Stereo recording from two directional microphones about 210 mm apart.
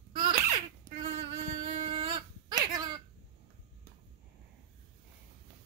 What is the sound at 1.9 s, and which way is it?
Dog, 25° right (ahead or behind).